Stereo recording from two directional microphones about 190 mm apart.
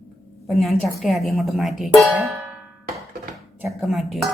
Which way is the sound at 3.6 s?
Centre (ahead or behind).